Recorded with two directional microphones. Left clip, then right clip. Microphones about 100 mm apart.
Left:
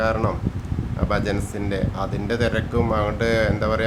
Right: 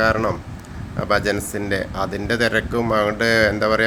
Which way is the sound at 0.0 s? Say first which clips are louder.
Right 4 dB; 25° right (ahead or behind).